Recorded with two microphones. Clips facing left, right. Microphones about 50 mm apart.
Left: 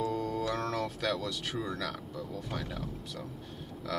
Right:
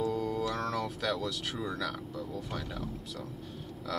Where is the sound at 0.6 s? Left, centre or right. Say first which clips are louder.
Even; centre.